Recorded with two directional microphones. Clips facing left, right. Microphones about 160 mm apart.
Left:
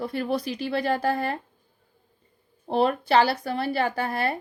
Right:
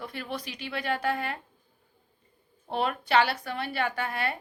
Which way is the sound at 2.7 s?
35° left (ahead or behind).